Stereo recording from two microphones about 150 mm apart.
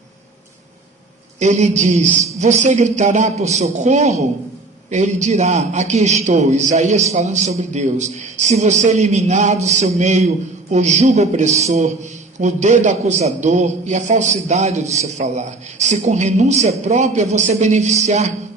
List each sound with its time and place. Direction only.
1.4 s a man's voice: 50° right (ahead or behind)